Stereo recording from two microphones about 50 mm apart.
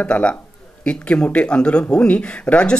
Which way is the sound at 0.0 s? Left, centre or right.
Left.